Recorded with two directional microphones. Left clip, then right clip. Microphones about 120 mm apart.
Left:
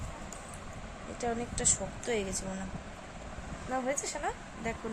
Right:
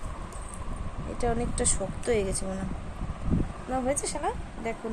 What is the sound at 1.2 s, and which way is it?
Speech, 30° right (ahead or behind).